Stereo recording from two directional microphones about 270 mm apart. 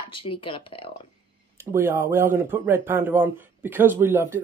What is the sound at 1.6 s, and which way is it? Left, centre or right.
Speech, centre.